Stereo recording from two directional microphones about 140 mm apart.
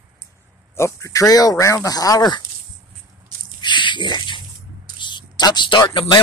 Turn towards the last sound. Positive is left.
turn(degrees=35)  # may be behind; listen again after turning